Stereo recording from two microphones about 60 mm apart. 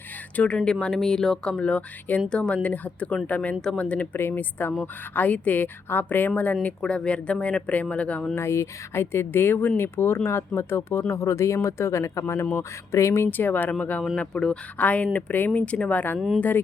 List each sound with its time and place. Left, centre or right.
0.3 s speech: centre
4.2 s speech: left
6.8 s speech: centre
8.4 s speech: left
14.2 s speech: centre
14.8 s speech: left
16.1 s speech: centre
16.4 s speech: left